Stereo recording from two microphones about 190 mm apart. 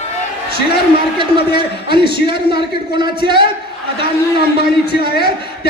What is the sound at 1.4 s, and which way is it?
A man's voice, 55° left (ahead or behind).